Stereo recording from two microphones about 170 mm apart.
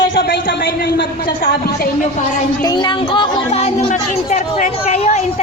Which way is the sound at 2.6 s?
25° left (ahead or behind).